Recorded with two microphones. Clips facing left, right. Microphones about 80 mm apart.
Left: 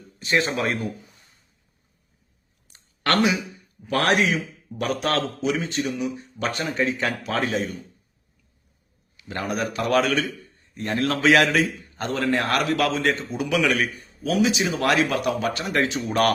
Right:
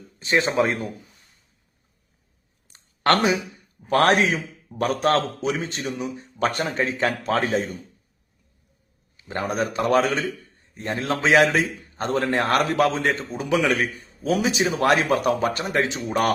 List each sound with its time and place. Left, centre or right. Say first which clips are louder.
0.2 s a man's voice: right 3 dB; right
2.7 s a sound: right 2 dB; right
3.8 s a man's voice: right 3 dB; right
9.1 s a man's voice: right 2 dB; right
15.7 s a man's voice: even; right